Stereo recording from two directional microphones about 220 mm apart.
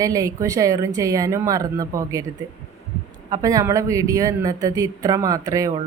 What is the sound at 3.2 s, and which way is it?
Speech, 15° right (ahead or behind).